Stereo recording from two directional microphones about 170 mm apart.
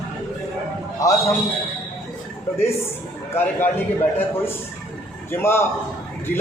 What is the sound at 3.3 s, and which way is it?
Speech, 10° left (ahead or behind).